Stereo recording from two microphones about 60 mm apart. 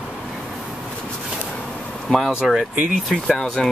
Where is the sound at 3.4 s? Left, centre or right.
Centre.